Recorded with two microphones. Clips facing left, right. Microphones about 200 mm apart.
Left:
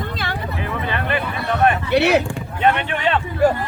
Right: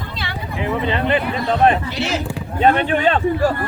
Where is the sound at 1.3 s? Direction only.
30° right (ahead or behind).